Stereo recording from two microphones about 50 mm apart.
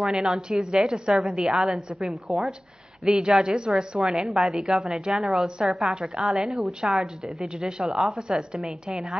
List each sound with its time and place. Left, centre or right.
0.0 s a woman's voice: centre
7.9 s a woman's voice: centre
8.2 s a woman's voice: centre